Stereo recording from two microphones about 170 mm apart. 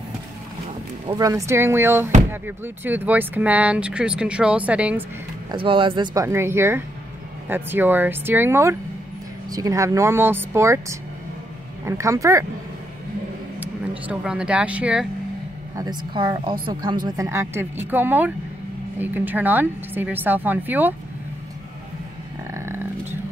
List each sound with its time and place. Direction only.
1.0 s speech: 20° right (ahead or behind)
5.5 s a woman's voice: 30° right (ahead or behind)
6.2 s speech: 15° right (ahead or behind)
13.6 s speech: 5° right (ahead or behind)
15.7 s a woman's voice: 25° right (ahead or behind)
22.5 s a sound: 15° right (ahead or behind)